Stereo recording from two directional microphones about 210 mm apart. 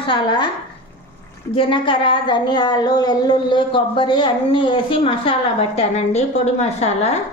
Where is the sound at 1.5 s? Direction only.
25° left (ahead or behind).